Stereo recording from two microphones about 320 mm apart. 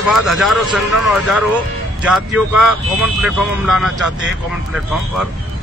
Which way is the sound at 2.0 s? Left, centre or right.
Centre.